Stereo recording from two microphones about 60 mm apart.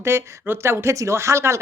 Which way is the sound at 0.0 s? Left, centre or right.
Right.